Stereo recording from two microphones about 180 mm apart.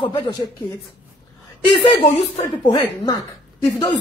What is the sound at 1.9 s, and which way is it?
Speech, 30° left (ahead or behind).